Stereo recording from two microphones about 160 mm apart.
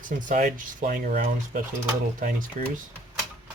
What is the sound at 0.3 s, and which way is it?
Speech, 55° right (ahead or behind).